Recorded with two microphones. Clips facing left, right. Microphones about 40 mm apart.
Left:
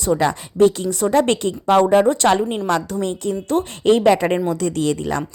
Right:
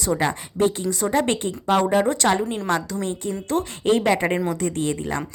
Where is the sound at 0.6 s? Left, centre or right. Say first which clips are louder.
Left 6 dB; left.